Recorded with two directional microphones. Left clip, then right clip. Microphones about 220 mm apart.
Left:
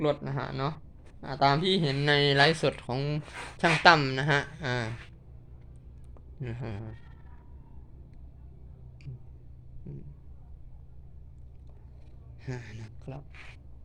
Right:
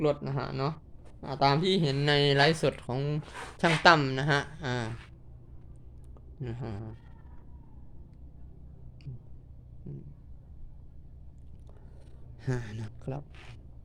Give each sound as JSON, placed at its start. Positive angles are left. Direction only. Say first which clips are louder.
{"t": 0.0, "sound": "speech", "louder": "even", "side_deg": -5}
{"t": 6.4, "sound": "speech", "louder": "even", "side_deg": 0}
{"t": 12.4, "sound": "speech", "louder": "right 5 dB", "side_deg": -40}